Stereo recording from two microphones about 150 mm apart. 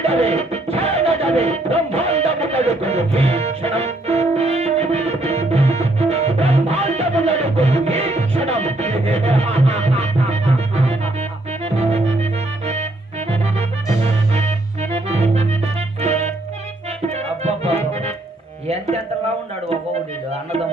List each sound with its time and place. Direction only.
0.0 s music: 45° right (ahead or behind)
14.0 s music: 45° right (ahead or behind)
17.4 s music: 45° right (ahead or behind)